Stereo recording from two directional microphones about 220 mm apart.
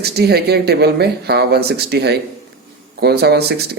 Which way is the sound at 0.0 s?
45° right (ahead or behind).